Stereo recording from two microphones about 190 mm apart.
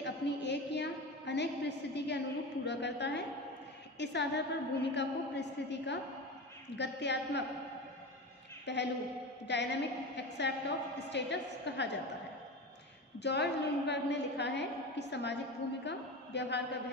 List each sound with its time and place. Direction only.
0.0 s a sound: 65° left (ahead or behind)
4.0 s a woman's voice: 65° left (ahead or behind)
8.6 s a woman's voice: 65° left (ahead or behind)
13.2 s a woman's voice: 65° left (ahead or behind)